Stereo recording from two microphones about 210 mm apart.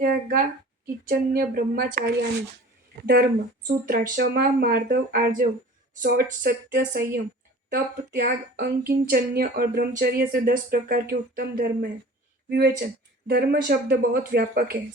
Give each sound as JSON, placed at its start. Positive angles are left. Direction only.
{"t": 0.0, "sound": "a sound", "side_deg": -45}
{"t": 1.0, "sound": "speech", "side_deg": -45}
{"t": 3.7, "sound": "speech", "side_deg": -40}